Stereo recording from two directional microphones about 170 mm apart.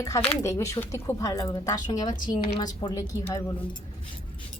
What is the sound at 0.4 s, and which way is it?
A woman's voice, 20° left (ahead or behind).